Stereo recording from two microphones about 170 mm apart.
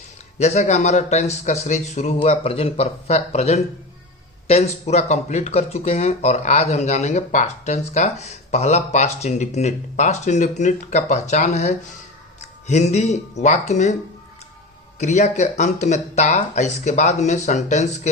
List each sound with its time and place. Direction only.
0.3 s speech: 40° left (ahead or behind)
14.9 s speech: 45° left (ahead or behind)